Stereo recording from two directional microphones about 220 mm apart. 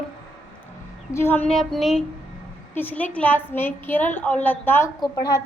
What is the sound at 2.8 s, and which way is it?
A woman's voice, 10° left (ahead or behind).